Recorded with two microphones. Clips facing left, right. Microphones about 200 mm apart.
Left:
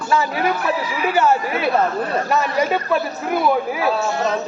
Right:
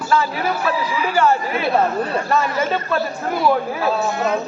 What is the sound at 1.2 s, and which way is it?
A man's voice, 15° left (ahead or behind).